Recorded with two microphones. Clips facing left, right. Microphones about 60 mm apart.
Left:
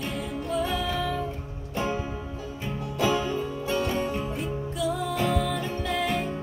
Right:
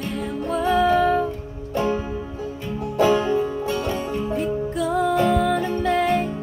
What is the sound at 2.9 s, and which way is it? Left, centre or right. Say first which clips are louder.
Music: right 8 dB; right.